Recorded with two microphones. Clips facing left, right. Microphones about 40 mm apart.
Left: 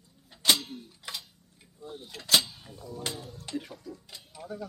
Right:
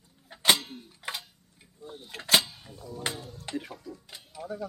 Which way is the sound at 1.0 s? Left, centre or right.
Right.